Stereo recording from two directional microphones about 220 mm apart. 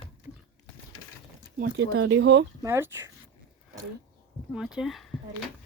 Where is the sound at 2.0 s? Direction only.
55° right (ahead or behind).